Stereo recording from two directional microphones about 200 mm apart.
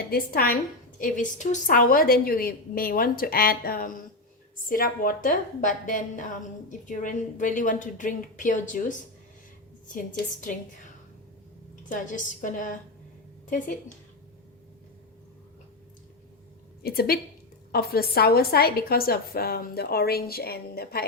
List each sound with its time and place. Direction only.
0.1 s a woman's voice: 50° left (ahead or behind)
16.8 s a woman's voice: 50° left (ahead or behind)